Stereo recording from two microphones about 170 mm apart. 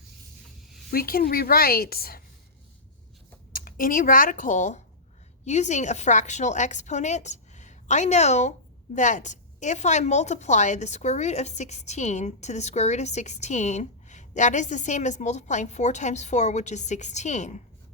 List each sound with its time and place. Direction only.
0.9 s a woman's voice: 60° left (ahead or behind)
3.5 s a woman's voice: 55° left (ahead or behind)